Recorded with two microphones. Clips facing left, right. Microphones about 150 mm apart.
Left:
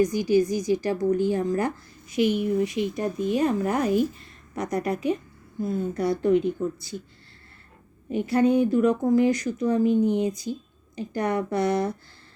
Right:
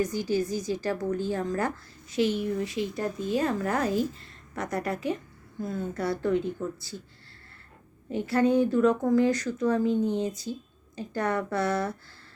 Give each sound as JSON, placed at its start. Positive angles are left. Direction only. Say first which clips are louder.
{"t": 0.0, "sound": "speech", "louder": "left 6 dB", "side_deg": 15}
{"t": 8.1, "sound": "speech", "louder": "left 3 dB", "side_deg": 15}